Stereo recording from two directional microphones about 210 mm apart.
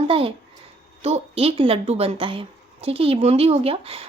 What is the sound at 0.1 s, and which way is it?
A child's voice, 25° right (ahead or behind).